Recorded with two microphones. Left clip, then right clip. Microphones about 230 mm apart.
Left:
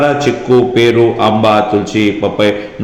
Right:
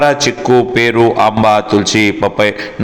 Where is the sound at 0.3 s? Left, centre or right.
Right.